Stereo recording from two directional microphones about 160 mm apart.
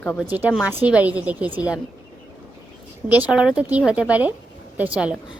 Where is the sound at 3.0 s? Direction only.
10° right (ahead or behind).